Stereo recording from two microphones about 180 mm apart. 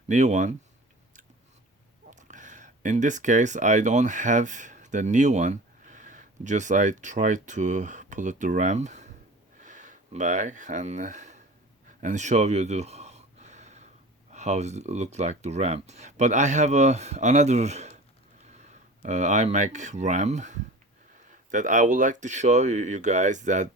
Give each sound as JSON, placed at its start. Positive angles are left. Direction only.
{"t": 0.1, "sound": "speech", "side_deg": -40}
{"t": 2.0, "sound": "speech", "side_deg": -45}
{"t": 11.9, "sound": "gasp", "side_deg": -45}
{"t": 14.3, "sound": "speech", "side_deg": -40}